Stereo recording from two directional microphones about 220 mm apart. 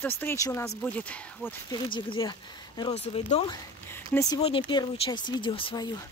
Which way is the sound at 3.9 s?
10° left (ahead or behind).